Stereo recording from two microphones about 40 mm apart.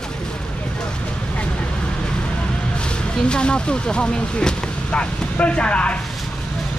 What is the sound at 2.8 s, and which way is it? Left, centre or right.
Speech, left.